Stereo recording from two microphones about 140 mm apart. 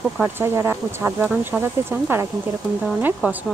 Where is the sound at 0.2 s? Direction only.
15° right (ahead or behind).